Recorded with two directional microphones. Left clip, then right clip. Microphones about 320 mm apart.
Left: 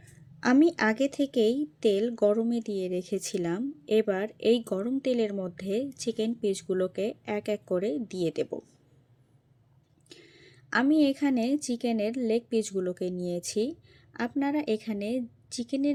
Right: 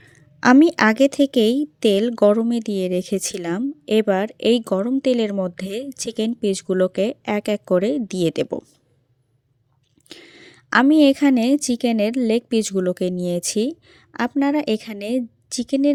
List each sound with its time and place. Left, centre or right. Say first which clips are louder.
0.3 s a woman's voice: right 9 dB; right
10.1 s a woman's voice: right 10 dB; right